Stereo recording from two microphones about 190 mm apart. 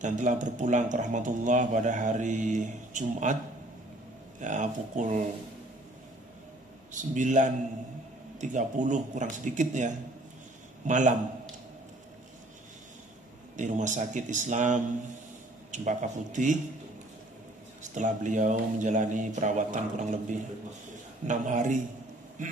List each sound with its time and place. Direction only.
0.0 s speech: 40° right (ahead or behind)
4.4 s speech: 40° right (ahead or behind)
6.9 s speech: 40° right (ahead or behind)
13.6 s speech: 40° right (ahead or behind)
17.8 s speech: 40° right (ahead or behind)